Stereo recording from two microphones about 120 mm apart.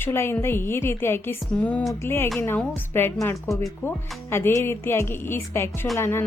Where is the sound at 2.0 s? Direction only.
20° left (ahead or behind).